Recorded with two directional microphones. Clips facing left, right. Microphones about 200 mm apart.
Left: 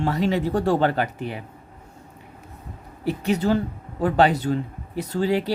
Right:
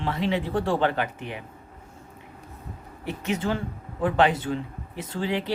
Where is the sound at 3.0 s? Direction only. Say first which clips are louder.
Left 6 dB; 35° left (ahead or behind).